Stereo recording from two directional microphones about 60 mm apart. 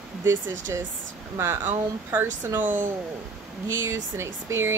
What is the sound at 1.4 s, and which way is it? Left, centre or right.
Speech, right.